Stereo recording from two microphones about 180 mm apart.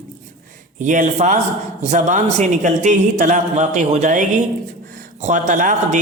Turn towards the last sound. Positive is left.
turn(degrees=-45)  # may be behind; listen again after turning